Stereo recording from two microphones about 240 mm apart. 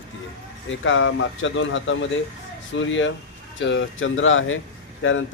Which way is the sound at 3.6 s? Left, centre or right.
Left.